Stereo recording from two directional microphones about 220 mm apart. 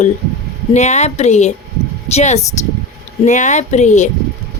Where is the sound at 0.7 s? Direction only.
30° left (ahead or behind).